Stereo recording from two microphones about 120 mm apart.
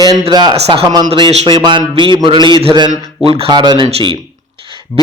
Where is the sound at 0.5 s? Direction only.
60° right (ahead or behind).